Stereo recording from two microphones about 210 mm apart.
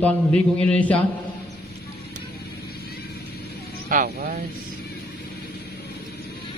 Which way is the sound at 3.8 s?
45° right (ahead or behind).